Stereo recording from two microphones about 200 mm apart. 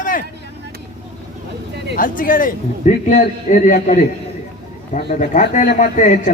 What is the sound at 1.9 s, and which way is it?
A man's voice, 45° left (ahead or behind).